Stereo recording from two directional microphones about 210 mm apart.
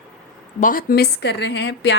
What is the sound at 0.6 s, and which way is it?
Speech, 45° left (ahead or behind).